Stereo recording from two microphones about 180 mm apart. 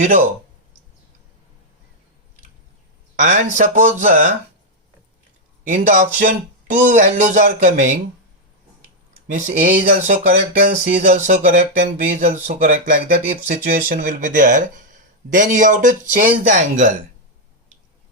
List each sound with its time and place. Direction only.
0.0 s speech: 45° right (ahead or behind)
3.2 s speech: 45° right (ahead or behind)
5.6 s speech: 45° right (ahead or behind)
9.2 s speech: 45° right (ahead or behind)